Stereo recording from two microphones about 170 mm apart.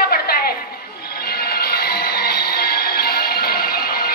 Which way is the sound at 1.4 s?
65° left (ahead or behind).